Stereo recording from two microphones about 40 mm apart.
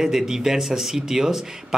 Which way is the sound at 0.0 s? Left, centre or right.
Centre.